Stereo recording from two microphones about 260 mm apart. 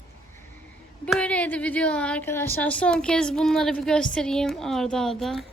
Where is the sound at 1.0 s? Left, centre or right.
Centre.